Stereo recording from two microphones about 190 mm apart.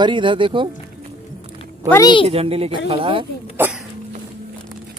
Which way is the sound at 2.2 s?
30° right (ahead or behind).